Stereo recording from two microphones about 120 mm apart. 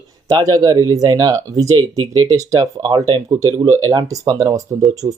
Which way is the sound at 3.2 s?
30° right (ahead or behind).